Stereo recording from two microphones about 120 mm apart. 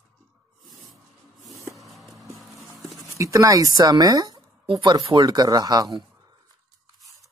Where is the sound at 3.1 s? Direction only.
25° right (ahead or behind).